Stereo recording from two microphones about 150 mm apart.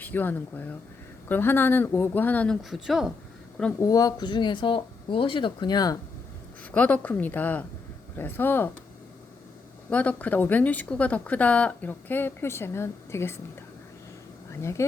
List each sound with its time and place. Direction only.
0.0 s speech: 10° left (ahead or behind)
2.6 s a woman's voice: centre (ahead or behind)
3.8 s speech: 25° left (ahead or behind)
6.7 s speech: 10° left (ahead or behind)
9.9 s speech: 10° left (ahead or behind)
14.5 s speech: 20° left (ahead or behind)